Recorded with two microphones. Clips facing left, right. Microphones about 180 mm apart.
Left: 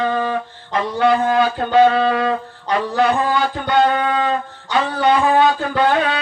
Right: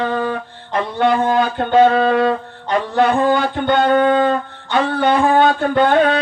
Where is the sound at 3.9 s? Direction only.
50° right (ahead or behind).